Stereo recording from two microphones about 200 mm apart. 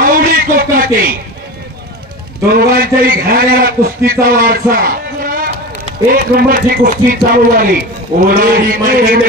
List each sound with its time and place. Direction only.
0.0 s a sound: 45° right (ahead or behind)
2.5 s speech: 45° right (ahead or behind)
6.0 s speech: 45° right (ahead or behind)